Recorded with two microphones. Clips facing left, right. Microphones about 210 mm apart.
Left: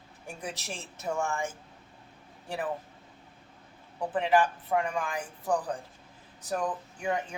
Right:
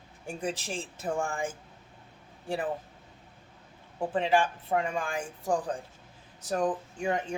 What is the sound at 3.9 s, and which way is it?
Speech, 25° right (ahead or behind).